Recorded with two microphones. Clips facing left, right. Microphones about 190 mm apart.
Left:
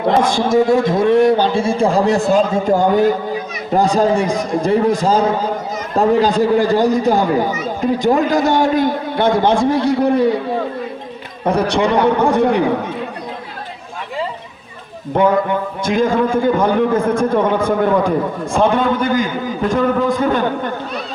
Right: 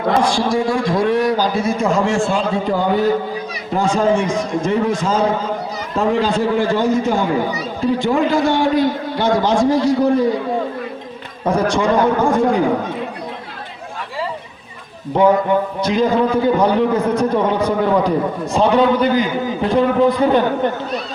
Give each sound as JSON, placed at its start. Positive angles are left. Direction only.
{"t": 0.3, "sound": "a man's voice", "side_deg": 20}
{"t": 11.4, "sound": "a man's voice", "side_deg": 65}
{"t": 15.8, "sound": "a man's voice", "side_deg": 50}